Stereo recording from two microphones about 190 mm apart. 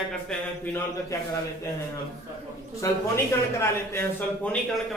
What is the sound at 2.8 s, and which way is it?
A man's voice, 15° left (ahead or behind).